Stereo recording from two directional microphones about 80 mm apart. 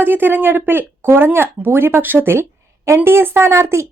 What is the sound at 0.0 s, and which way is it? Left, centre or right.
Speech, right.